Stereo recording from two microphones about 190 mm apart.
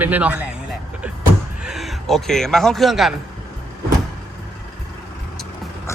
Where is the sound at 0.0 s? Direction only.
10° right (ahead or behind).